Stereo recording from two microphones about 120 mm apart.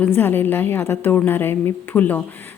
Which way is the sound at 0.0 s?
15° left (ahead or behind).